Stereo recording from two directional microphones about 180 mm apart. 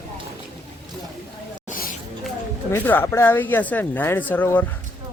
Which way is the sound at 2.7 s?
10° left (ahead or behind).